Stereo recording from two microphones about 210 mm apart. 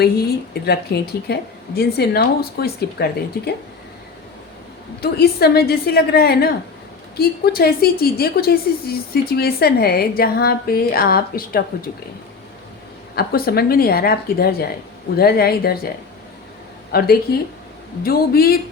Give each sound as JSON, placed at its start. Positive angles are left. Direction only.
{"t": 0.0, "sound": "a woman's voice", "side_deg": 50}
{"t": 5.1, "sound": "a woman's voice", "side_deg": 50}
{"t": 13.1, "sound": "a woman's voice", "side_deg": 45}
{"t": 16.9, "sound": "a woman's voice", "side_deg": 45}